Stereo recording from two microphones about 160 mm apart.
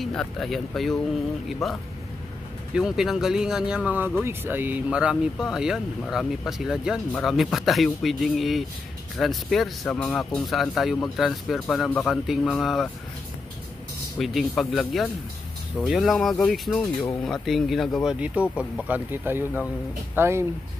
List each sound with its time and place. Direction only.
0.0 s speech: 5° left (ahead or behind)
14.1 s speech: centre (ahead or behind); by 20.4 s 15° right (ahead or behind)